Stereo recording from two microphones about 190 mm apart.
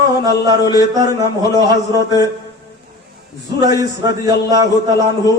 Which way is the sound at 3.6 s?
20° right (ahead or behind).